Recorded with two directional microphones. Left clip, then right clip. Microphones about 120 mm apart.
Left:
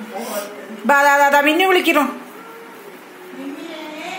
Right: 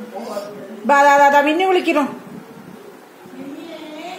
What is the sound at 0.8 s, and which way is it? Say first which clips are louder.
Speech: right 2 dB; 5° left (ahead or behind).